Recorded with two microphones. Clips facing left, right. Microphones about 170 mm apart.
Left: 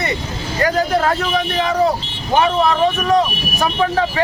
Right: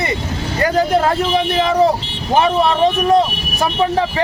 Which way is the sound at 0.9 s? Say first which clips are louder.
Right 2 dB; 25° right (ahead or behind).